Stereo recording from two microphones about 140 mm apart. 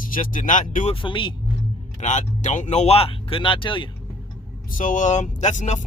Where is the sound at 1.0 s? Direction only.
35° left (ahead or behind).